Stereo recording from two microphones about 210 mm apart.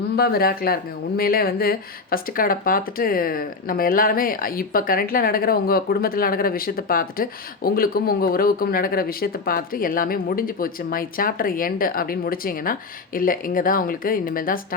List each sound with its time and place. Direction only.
0.2 s speech: 45° left (ahead or behind)